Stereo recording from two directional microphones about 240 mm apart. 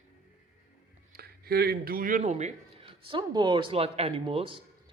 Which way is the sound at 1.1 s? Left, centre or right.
Right.